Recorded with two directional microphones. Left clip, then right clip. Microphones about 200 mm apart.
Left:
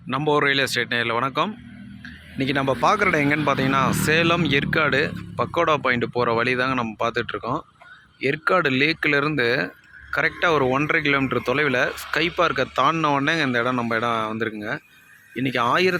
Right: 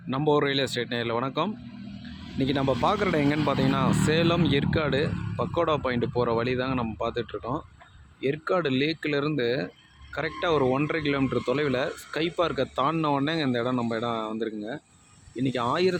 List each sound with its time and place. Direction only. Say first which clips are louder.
0.1 s speech: left 4 dB; 5° right (ahead or behind)